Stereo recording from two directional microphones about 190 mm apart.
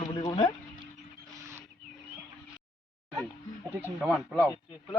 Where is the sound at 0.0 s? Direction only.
25° left (ahead or behind).